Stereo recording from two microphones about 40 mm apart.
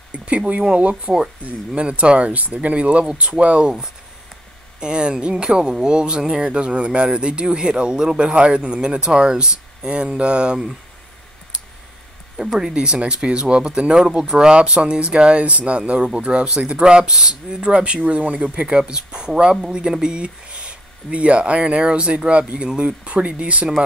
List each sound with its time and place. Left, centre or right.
0.1 s speech: right
4.7 s speech: right
12.5 s speech: centre